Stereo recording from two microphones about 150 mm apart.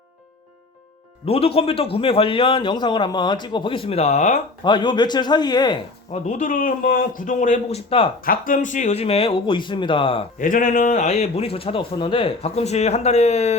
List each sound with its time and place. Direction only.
1.2 s a man's voice: 40° left (ahead or behind)
4.6 s a man's voice: 30° left (ahead or behind)
6.1 s speech: 50° left (ahead or behind)
7.9 s a man's voice: 40° left (ahead or behind)
8.2 s a man's voice: 70° left (ahead or behind); by 10.2 s 35° left (ahead or behind)
10.3 s speech: 65° left (ahead or behind); by 13.6 s 45° left (ahead or behind)